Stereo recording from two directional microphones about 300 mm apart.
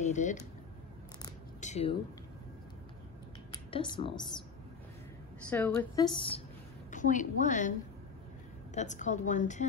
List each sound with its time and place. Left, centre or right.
0.0 s speech: left
1.6 s a sound: left
3.5 s speech: centre
5.5 s a woman's voice: centre; by 7.7 s left
8.7 s a woman's voice: left